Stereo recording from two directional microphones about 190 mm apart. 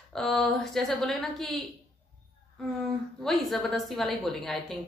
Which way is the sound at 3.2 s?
Centre (ahead or behind).